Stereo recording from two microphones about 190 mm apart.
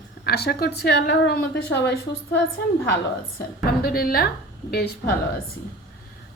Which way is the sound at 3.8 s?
50° left (ahead or behind).